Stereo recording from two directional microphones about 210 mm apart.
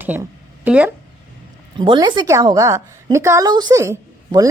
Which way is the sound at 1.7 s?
20° right (ahead or behind).